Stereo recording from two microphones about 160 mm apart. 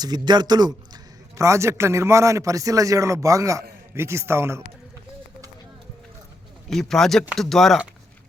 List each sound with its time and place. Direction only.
0.0 s a man's voice: 25° right (ahead or behind)
6.7 s speech: centre (ahead or behind)